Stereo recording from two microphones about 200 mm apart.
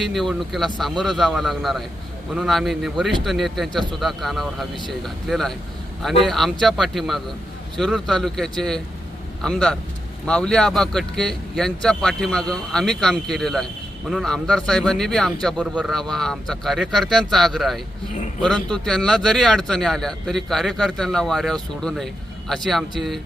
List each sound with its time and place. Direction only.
0.0 s speech: centre (ahead or behind)